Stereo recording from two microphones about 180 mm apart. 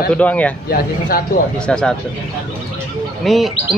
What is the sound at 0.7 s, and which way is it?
Speech, 55° left (ahead or behind).